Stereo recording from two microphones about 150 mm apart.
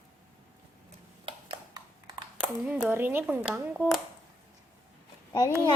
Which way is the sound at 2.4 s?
5° right (ahead or behind).